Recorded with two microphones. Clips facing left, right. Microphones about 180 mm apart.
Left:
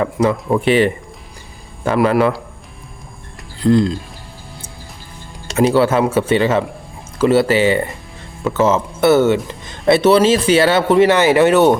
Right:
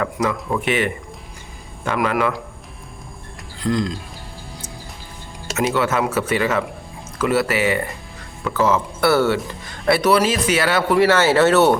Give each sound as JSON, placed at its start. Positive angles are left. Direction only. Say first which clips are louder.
{"t": 0.0, "sound": "speech", "louder": "left 5 dB", "side_deg": 25}
{"t": 3.6, "sound": "speech", "louder": "left 8 dB", "side_deg": 30}
{"t": 5.5, "sound": "speech", "louder": "left 6 dB", "side_deg": 30}